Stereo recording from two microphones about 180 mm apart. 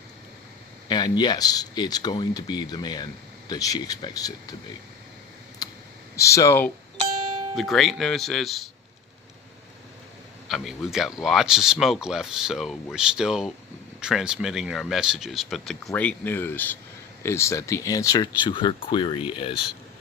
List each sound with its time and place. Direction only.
0.9 s speech: 25° left (ahead or behind)
5.6 s a sound: 20° left (ahead or behind)
6.1 s speech: 15° left (ahead or behind)
7.5 s speech: centre (ahead or behind)
10.5 s speech: centre (ahead or behind); by 19.6 s 30° left (ahead or behind)